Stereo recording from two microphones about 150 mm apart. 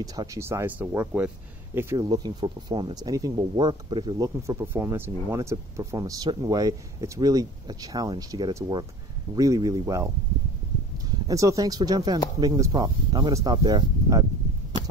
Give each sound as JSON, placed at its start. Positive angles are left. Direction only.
{"t": 0.0, "sound": "speech", "side_deg": -25}
{"t": 2.0, "sound": "speech", "side_deg": -25}
{"t": 11.1, "sound": "speech", "side_deg": -20}